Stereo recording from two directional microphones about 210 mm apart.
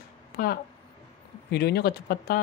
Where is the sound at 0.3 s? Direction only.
50° left (ahead or behind).